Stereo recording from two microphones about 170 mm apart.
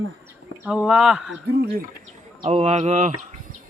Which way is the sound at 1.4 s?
70° right (ahead or behind).